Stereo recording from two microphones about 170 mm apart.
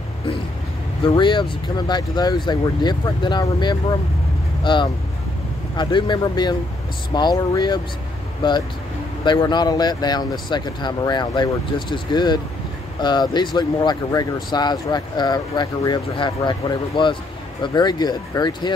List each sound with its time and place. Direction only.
1.0 s speech: 30° left (ahead or behind)